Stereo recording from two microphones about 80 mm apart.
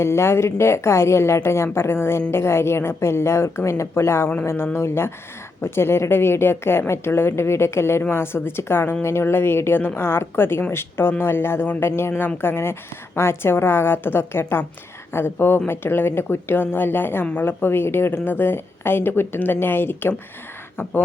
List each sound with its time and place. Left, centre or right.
0.0 s a woman's voice: left